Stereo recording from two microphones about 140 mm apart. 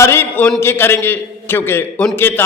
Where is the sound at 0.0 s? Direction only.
15° left (ahead or behind).